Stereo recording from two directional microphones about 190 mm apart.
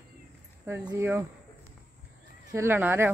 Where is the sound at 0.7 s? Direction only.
15° right (ahead or behind).